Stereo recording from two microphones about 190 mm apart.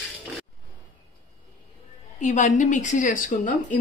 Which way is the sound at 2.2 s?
40° left (ahead or behind).